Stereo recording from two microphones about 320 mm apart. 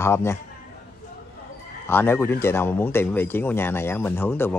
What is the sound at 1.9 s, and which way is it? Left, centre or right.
Speech, centre.